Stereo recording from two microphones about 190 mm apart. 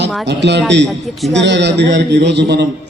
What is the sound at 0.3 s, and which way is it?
A man's voice, 65° right (ahead or behind).